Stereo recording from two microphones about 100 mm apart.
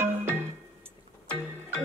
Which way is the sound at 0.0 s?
25° right (ahead or behind).